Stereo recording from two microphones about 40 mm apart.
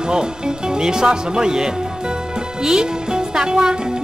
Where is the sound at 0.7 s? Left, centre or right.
Centre.